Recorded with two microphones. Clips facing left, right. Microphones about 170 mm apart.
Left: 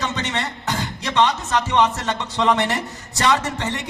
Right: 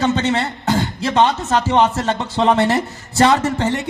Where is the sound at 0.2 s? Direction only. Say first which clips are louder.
Right 7 dB; 30° right (ahead or behind).